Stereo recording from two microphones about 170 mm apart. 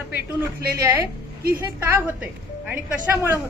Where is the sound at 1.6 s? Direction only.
15° right (ahead or behind).